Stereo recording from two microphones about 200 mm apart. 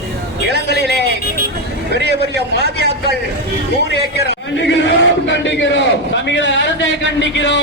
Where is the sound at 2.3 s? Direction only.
55° right (ahead or behind).